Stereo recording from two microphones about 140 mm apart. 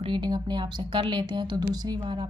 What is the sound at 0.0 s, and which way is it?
Speech, 35° right (ahead or behind).